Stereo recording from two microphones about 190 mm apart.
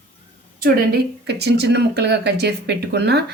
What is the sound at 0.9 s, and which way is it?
Speech, 60° right (ahead or behind).